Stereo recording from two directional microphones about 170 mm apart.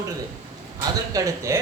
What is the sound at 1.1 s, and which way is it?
Speech, 20° right (ahead or behind).